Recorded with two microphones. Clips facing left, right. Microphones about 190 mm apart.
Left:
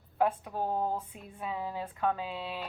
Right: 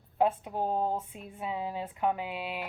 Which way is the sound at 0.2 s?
20° right (ahead or behind).